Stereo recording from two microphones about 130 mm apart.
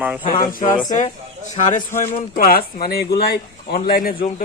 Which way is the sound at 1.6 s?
70° left (ahead or behind).